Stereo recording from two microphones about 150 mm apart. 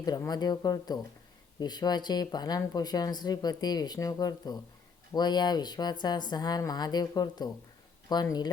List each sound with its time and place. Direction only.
0.0 s speech: 25° left (ahead or behind)